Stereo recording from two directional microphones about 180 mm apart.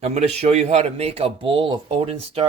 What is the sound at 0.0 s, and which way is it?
Speech, 35° right (ahead or behind).